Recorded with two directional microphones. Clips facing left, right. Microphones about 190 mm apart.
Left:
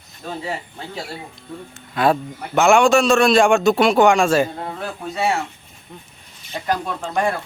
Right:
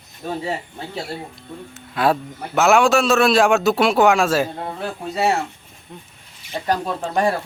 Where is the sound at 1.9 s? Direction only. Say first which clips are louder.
Left 1 dB; centre (ahead or behind).